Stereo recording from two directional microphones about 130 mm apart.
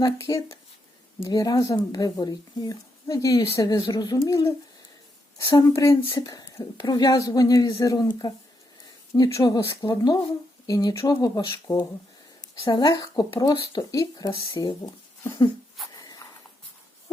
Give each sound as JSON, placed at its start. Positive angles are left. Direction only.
{"t": 0.0, "sound": "speech", "side_deg": 25}
{"t": 14.3, "sound": "speech", "side_deg": 40}
{"t": 15.2, "sound": "a sound", "side_deg": 25}